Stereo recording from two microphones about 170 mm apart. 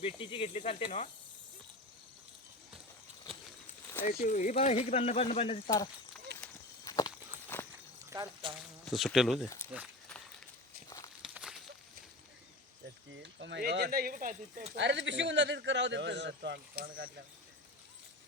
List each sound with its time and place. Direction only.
0.0 s speech: 30° left (ahead or behind)
4.0 s speech: 45° left (ahead or behind)
6.8 s walk: 20° left (ahead or behind)
8.1 s speech: 25° right (ahead or behind)
8.8 s speech: centre (ahead or behind)
10.8 s walk: 20° left (ahead or behind)
11.2 s walk: 5° right (ahead or behind)
13.4 s speech: 85° right; by 14.3 s 55° right (ahead or behind)
14.8 s speech: 90° right; by 17.1 s 60° right (ahead or behind)